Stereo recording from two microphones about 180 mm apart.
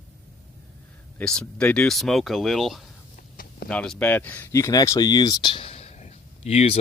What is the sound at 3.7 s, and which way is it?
Speech, 5° left (ahead or behind).